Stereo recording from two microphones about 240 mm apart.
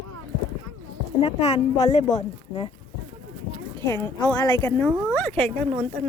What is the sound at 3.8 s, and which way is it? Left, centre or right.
Speech, centre.